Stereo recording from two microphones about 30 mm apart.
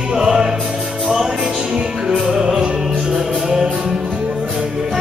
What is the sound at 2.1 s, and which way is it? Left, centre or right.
Music, right.